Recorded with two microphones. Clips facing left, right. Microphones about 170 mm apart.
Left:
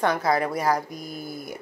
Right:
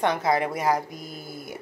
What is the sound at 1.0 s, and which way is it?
Mantra, 45° left (ahead or behind).